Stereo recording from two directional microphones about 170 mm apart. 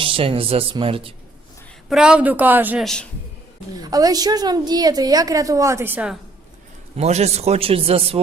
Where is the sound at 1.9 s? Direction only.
5° right (ahead or behind).